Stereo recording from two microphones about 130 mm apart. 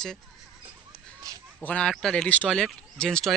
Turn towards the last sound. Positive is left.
turn(degrees=5)  # may be behind; listen again after turning